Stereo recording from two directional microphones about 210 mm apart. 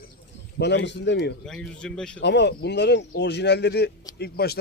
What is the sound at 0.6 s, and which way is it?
Speech, 55° left (ahead or behind).